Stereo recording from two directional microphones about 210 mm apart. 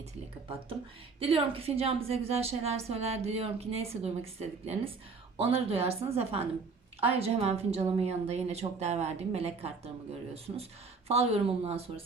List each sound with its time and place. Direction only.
1.2 s a woman's voice: 25° right (ahead or behind)